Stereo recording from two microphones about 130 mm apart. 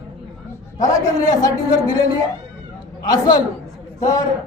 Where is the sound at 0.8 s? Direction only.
30° left (ahead or behind).